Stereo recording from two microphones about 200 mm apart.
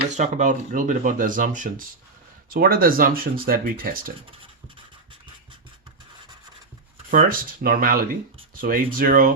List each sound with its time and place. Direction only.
0.1 s speech: 35° right (ahead or behind)
7.1 s speech: 45° right (ahead or behind)